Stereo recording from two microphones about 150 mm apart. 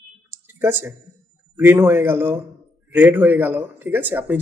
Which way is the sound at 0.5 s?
15° right (ahead or behind).